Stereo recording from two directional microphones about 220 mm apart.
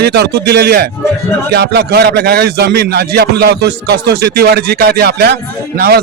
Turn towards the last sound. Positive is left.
turn(degrees=-45)  # may be behind; listen again after turning